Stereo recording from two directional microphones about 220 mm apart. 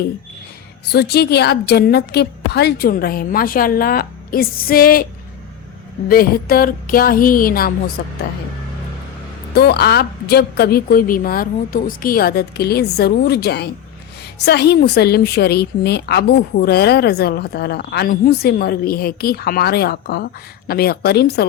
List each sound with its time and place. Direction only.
0.9 s a woman's voice: 45° left (ahead or behind)
6.1 s music: 40° left (ahead or behind)
9.6 s a woman's voice: 45° left (ahead or behind)